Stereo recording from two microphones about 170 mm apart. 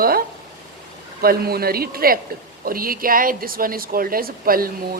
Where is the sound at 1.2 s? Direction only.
60° right (ahead or behind).